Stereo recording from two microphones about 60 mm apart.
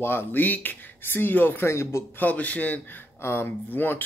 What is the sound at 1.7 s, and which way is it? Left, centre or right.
Speech, left.